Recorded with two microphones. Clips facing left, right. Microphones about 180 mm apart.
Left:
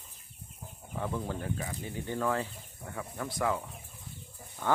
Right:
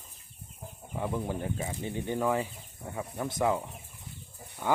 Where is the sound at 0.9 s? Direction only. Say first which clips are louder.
Right 2 dB; 15° right (ahead or behind).